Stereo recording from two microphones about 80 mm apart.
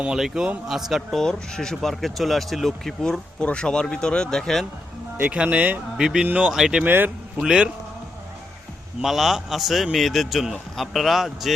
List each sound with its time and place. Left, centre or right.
0.0 s a man's voice: centre
1.2 s speech: centre
5.2 s speech: centre
6.8 s speech: right
7.3 s speech: centre
9.0 s a man's voice: centre